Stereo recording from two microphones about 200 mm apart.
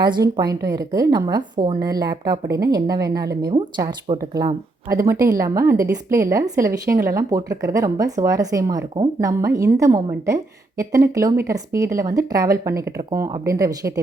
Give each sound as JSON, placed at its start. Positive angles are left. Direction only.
{"t": 0.1, "sound": "a woman's voice", "side_deg": -20}